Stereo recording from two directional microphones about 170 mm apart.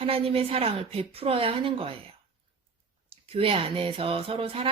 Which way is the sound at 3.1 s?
35° right (ahead or behind).